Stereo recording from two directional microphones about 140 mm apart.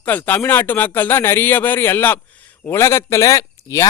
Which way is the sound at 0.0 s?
10° left (ahead or behind).